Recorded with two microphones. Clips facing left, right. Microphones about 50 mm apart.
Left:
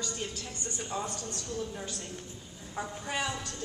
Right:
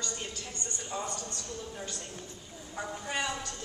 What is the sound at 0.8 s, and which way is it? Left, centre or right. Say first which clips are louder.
A woman's voice: even; centre.